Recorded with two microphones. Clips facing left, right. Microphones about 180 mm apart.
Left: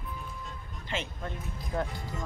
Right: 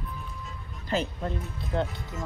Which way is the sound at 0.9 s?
35° right (ahead or behind).